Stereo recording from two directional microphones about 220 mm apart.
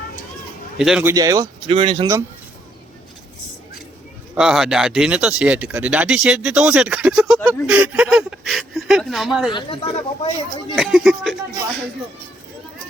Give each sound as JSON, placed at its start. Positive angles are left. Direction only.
{"t": 0.8, "sound": "speech", "side_deg": -5}
{"t": 1.1, "sound": "speech", "side_deg": -15}
{"t": 4.4, "sound": "speech", "side_deg": 0}
{"t": 9.5, "sound": "speech", "side_deg": 25}
{"t": 10.8, "sound": "speech", "side_deg": 0}